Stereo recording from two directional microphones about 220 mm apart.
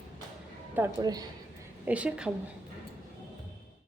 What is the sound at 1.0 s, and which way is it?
Speech, 15° right (ahead or behind).